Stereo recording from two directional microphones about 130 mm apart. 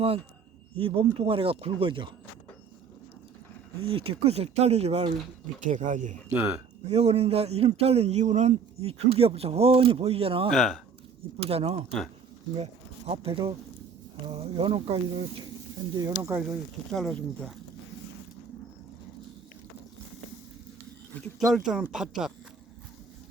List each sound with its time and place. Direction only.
0.8 s a man's voice: 45° right (ahead or behind)
3.8 s a man's voice: 45° right (ahead or behind)
5.5 s speech: 75° right (ahead or behind)
6.3 s speech: 20° right (ahead or behind)
6.8 s a man's voice: 55° right (ahead or behind)
10.5 s speech: centre (ahead or behind)
11.3 s a man's voice: 50° right (ahead or behind)
13.1 s a man's voice: 45° right (ahead or behind)
16.0 s speech: 25° right (ahead or behind)
16.9 s speech: 5° left (ahead or behind)
21.3 s speech: centre (ahead or behind)